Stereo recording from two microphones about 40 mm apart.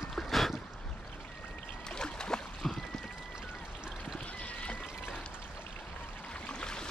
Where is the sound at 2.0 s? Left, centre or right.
Centre.